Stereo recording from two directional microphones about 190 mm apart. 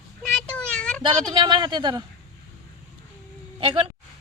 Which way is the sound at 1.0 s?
25° right (ahead or behind).